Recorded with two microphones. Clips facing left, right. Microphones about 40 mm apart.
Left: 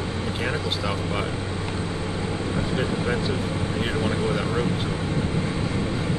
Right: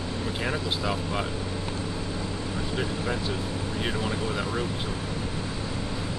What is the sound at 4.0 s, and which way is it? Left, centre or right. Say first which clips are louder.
Speech: left 5 dB; left.